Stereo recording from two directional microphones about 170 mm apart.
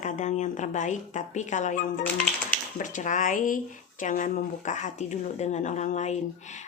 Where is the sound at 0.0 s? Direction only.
45° left (ahead or behind).